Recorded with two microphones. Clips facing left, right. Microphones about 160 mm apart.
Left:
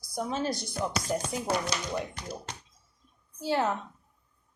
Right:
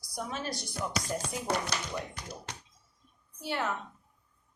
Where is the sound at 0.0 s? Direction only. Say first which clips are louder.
Left 6 dB; 25° left (ahead or behind).